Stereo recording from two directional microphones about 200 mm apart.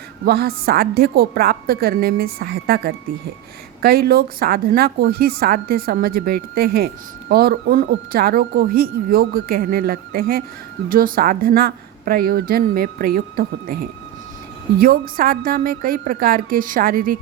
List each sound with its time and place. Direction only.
0.3 s a woman's voice: 50° right (ahead or behind)
14.8 s a woman's voice: 45° right (ahead or behind)